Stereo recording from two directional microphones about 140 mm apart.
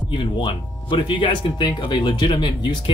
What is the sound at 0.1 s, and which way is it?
Speech, 35° left (ahead or behind).